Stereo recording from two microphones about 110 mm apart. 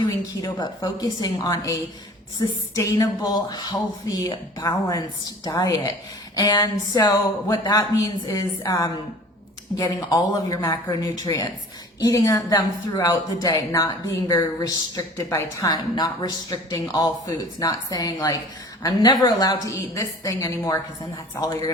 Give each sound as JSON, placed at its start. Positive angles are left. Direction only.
{"t": 0.4, "sound": "speech", "side_deg": 35}